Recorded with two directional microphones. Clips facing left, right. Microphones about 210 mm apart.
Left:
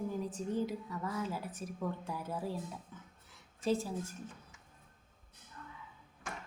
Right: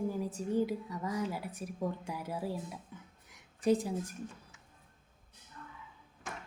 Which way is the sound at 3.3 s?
15° right (ahead or behind).